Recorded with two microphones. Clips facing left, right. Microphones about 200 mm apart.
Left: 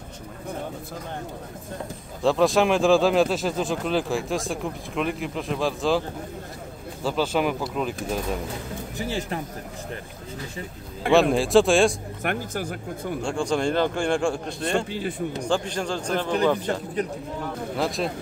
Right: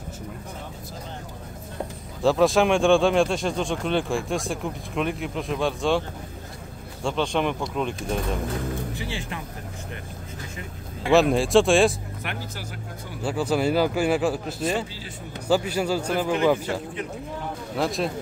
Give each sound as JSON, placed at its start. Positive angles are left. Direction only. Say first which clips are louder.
{"t": 2.2, "sound": "speech", "louder": "right 1 dB", "side_deg": 0}
{"t": 8.9, "sound": "speech", "louder": "left 4 dB", "side_deg": 40}
{"t": 11.1, "sound": "speech", "louder": "even", "side_deg": 0}
{"t": 12.2, "sound": "speech", "louder": "left 6 dB", "side_deg": 50}
{"t": 13.2, "sound": "speech", "louder": "right 2 dB", "side_deg": -5}
{"t": 14.9, "sound": "speech", "louder": "left 11 dB", "side_deg": 55}
{"t": 15.4, "sound": "a man's voice", "louder": "right 5 dB", "side_deg": -5}
{"t": 16.7, "sound": "speech", "louder": "left 2 dB", "side_deg": 40}
{"t": 17.7, "sound": "speech", "louder": "right 1 dB", "side_deg": 0}